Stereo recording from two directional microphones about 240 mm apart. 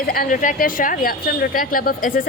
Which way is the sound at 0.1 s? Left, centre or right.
Left.